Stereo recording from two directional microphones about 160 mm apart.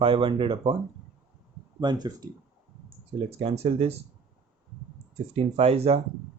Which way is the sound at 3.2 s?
40° right (ahead or behind).